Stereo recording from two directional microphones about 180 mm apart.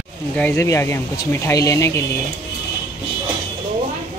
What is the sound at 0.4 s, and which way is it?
Speech, 10° left (ahead or behind).